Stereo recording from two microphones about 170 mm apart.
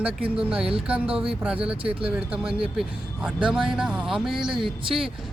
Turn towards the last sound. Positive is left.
turn(degrees=0)  # may be behind; listen again after turning